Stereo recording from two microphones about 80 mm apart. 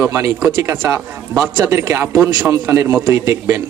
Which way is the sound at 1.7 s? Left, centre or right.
Right.